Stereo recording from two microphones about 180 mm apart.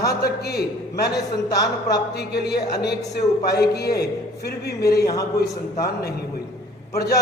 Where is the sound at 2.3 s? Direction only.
65° left (ahead or behind).